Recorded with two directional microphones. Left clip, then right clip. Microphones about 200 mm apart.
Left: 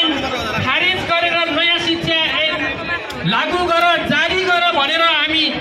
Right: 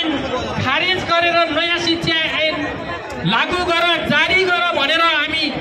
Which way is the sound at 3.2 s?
25° right (ahead or behind).